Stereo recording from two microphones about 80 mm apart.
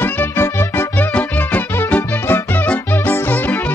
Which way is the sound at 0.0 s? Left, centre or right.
Left.